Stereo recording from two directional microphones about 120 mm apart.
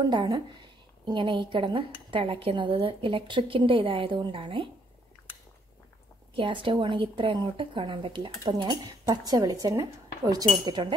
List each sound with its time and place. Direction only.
0.1 s speech: 40° right (ahead or behind)
6.3 s speech: 45° right (ahead or behind)